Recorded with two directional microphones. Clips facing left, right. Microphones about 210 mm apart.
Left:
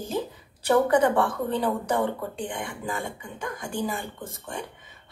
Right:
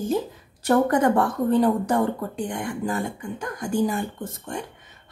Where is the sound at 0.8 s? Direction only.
45° right (ahead or behind).